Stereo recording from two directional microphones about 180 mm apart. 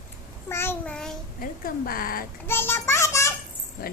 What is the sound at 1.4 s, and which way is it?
Speech, 55° left (ahead or behind).